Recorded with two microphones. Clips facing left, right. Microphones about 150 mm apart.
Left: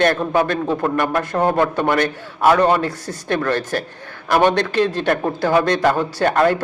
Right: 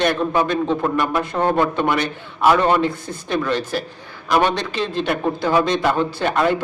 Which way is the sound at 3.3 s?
55° left (ahead or behind).